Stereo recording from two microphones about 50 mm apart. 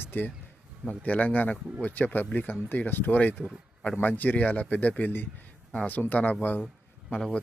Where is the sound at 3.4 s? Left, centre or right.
Left.